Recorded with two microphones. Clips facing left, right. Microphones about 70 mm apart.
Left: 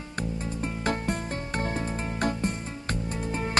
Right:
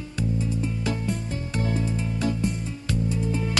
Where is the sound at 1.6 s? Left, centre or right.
Left.